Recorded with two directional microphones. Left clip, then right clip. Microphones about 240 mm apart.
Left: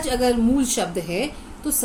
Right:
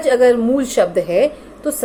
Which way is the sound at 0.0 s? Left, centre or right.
Left.